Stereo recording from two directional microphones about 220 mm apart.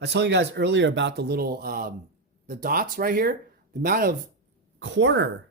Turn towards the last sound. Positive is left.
turn(degrees=-55)  # may be behind; listen again after turning